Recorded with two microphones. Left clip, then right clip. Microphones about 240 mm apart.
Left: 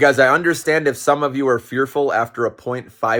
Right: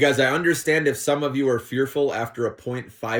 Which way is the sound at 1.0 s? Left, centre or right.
Left.